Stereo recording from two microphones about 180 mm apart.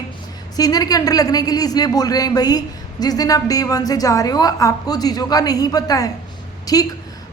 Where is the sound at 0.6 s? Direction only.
20° left (ahead or behind).